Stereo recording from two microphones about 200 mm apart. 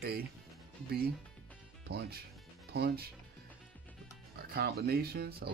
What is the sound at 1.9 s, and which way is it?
Speech, 55° right (ahead or behind).